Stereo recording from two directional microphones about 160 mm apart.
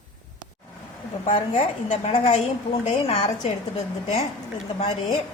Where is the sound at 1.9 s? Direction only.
35° left (ahead or behind).